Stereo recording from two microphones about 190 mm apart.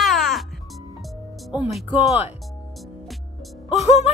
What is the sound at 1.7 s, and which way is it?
Speech, 5° right (ahead or behind).